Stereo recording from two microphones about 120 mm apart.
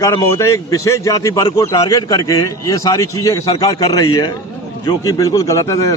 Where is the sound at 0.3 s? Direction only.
25° left (ahead or behind).